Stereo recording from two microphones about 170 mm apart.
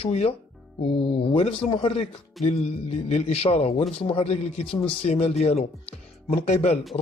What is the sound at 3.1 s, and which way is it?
A man's voice, 35° left (ahead or behind).